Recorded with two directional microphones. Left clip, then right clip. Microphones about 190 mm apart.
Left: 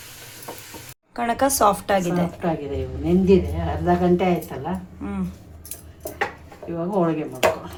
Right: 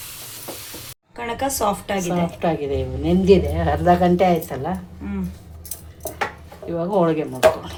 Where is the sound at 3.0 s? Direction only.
30° right (ahead or behind).